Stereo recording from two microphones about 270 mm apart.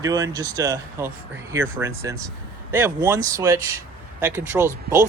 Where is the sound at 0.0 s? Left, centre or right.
Centre.